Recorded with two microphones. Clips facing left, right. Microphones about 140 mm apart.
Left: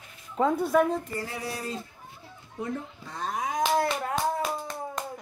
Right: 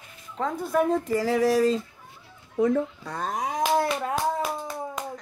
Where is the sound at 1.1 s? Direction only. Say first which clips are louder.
Right 13 dB; 90° right.